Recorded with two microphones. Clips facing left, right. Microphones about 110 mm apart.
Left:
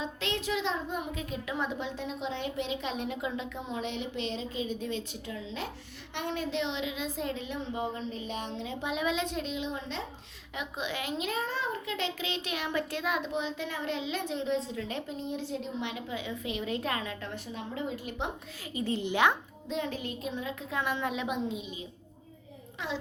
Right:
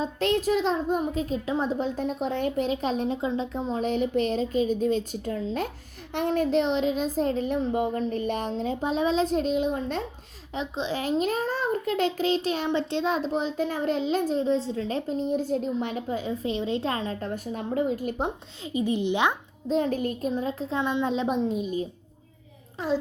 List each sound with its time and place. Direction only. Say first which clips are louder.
0.0 s a child's voice: right 9 dB; 45° right (ahead or behind)
10.5 s a child's voice: right 6 dB; 30° right (ahead or behind)
18.6 s speech: right 7 dB; 20° right (ahead or behind)
19.6 s a child's voice: right 9 dB; 40° right (ahead or behind)
21.5 s a child's voice: right 11 dB; 45° right (ahead or behind)